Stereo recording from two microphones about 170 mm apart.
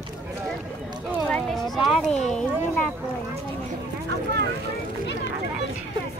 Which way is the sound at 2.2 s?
5° left (ahead or behind).